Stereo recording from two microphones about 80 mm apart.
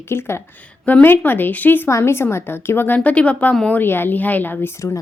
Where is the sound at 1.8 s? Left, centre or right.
Left.